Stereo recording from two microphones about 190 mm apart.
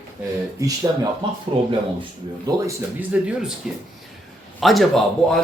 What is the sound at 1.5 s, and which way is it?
Speech, 25° right (ahead or behind).